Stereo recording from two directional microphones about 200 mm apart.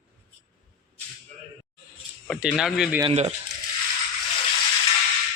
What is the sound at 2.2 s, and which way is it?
Speech, centre (ahead or behind).